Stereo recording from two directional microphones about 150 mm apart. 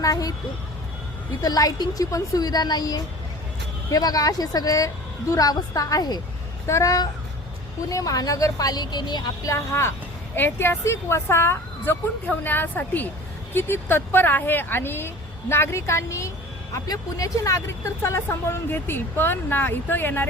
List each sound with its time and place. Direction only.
0.0 s speech: 25° left (ahead or behind)
1.4 s speech: 25° left (ahead or behind)